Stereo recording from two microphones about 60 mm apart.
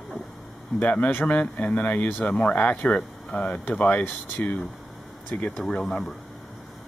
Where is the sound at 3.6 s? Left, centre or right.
Left.